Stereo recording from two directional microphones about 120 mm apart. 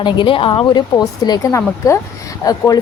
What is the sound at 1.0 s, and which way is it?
A woman's voice, 35° left (ahead or behind).